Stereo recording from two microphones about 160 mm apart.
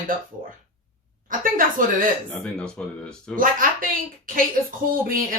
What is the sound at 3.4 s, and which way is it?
Speech, 60° right (ahead or behind).